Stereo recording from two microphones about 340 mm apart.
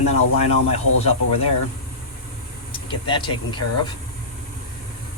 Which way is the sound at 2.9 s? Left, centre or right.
Centre.